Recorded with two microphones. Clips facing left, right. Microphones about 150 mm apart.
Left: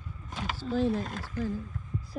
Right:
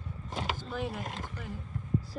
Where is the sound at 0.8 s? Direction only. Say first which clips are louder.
Left 7 dB; 20° right (ahead or behind).